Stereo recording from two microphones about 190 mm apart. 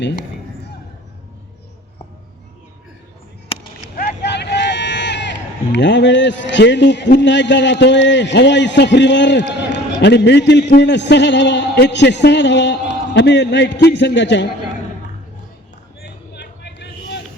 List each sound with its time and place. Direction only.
3.9 s a man's voice: 60° left (ahead or behind)
16.0 s vehicle: 65° left (ahead or behind)